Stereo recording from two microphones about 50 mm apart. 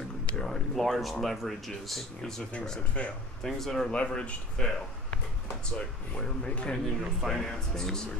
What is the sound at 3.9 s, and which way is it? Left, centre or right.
Speech, left.